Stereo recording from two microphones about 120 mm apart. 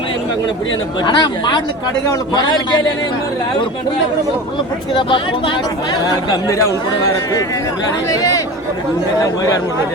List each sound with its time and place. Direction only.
1.0 s speech: 40° left (ahead or behind)
4.9 s speech: 45° left (ahead or behind)
6.3 s speech: 25° left (ahead or behind)